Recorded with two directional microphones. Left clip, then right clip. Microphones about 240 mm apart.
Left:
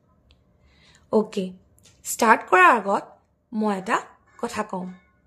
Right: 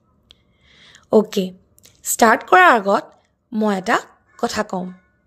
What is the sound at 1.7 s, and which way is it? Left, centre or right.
Speech, right.